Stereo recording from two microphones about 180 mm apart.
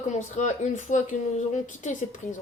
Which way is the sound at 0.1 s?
40° left (ahead or behind).